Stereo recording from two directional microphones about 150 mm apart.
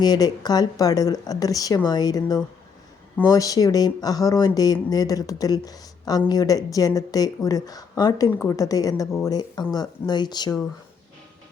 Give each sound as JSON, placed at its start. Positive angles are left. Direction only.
{"t": 0.0, "sound": "speech", "side_deg": 25}